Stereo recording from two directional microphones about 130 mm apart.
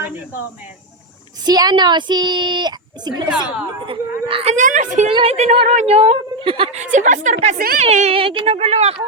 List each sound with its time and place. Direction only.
1.5 s speech: 30° right (ahead or behind)
3.8 s a woman's voice: 45° right (ahead or behind)
4.5 s a woman's voice: 75° right (ahead or behind)
5.1 s a woman's voice: 50° right (ahead or behind)
6.7 s a woman's voice: 75° right (ahead or behind)
7.3 s a woman's voice: 55° right (ahead or behind)